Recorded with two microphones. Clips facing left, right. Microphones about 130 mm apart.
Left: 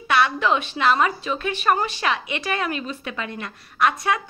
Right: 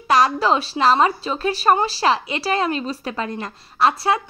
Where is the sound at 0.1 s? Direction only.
35° right (ahead or behind).